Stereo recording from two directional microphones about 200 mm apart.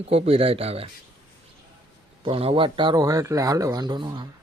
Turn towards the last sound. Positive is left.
turn(degrees=-20)  # may be behind; listen again after turning